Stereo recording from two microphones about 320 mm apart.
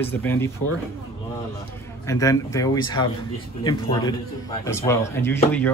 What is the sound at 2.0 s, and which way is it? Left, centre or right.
Speech, centre.